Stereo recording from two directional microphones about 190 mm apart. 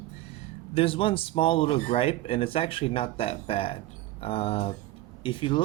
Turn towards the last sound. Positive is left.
turn(degrees=25)  # may be behind; listen again after turning